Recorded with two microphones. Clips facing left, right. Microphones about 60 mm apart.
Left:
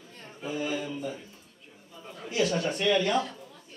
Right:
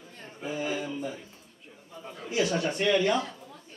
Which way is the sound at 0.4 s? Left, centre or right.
Centre.